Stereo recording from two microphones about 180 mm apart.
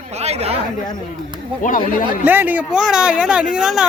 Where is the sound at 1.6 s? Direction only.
50° left (ahead or behind).